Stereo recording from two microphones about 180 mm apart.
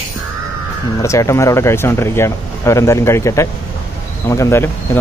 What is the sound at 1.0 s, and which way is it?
Speech, 15° left (ahead or behind).